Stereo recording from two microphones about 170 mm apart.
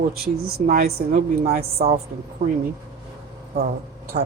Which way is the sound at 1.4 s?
40° right (ahead or behind).